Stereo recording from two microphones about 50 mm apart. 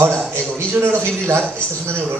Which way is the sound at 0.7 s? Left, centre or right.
Right.